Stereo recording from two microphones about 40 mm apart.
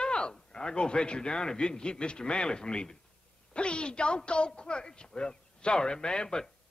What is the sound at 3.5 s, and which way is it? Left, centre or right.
A man's voice, left.